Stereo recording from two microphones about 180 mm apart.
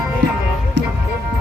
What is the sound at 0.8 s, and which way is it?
Music, 80° right.